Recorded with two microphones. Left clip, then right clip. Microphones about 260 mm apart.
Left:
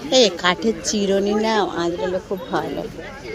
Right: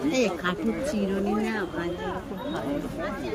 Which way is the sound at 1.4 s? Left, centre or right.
Left.